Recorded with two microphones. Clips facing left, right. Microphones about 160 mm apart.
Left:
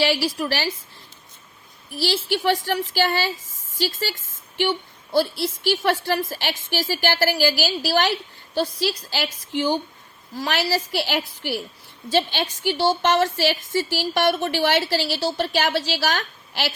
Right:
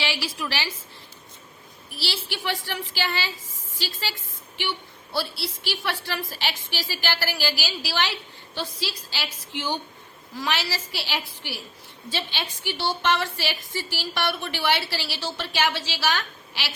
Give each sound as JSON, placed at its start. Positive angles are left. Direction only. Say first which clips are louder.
{"t": 0.0, "sound": "a woman's voice", "louder": "left 8 dB", "side_deg": 40}
{"t": 2.0, "sound": "a woman's voice", "louder": "left 9 dB", "side_deg": 45}